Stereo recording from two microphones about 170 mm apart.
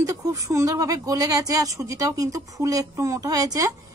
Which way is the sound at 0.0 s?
20° right (ahead or behind).